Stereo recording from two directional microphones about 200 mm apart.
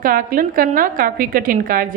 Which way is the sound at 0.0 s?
45° right (ahead or behind).